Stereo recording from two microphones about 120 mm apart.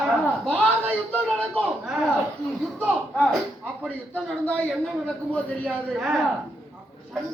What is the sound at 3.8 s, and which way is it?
Speech, 10° left (ahead or behind).